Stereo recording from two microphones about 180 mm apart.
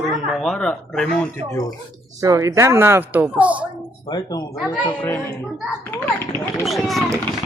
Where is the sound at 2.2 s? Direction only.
15° right (ahead or behind).